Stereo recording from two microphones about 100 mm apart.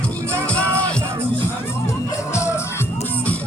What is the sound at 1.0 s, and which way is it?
Music, 25° right (ahead or behind).